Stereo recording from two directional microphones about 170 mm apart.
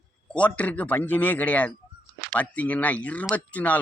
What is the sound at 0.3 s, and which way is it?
Speech, 10° left (ahead or behind).